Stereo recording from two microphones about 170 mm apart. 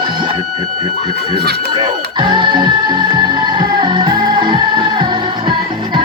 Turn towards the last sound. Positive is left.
turn(degrees=-25)  # may be behind; listen again after turning